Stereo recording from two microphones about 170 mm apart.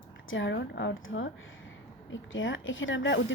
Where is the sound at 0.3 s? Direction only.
90° left.